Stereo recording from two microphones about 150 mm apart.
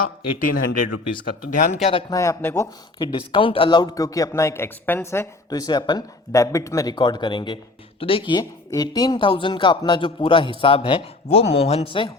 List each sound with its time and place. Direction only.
0.3 s speech: 65° left (ahead or behind)
1.5 s speech: 45° left (ahead or behind)
2.0 s a man's voice: 20° left (ahead or behind)
3.0 s a man's voice: 35° left (ahead or behind)